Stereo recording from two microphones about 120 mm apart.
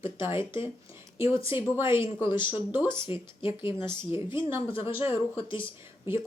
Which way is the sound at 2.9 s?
45° left (ahead or behind).